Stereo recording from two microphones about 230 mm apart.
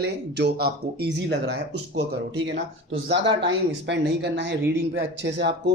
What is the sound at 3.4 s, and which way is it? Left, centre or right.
Speech, right.